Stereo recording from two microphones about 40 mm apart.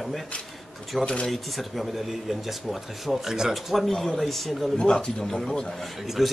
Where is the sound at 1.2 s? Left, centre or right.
Centre.